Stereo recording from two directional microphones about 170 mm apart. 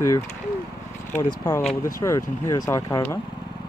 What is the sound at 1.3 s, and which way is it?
Speech, 20° left (ahead or behind).